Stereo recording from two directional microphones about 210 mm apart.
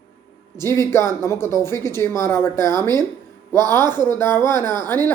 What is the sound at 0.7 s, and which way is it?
Speech, 10° left (ahead or behind).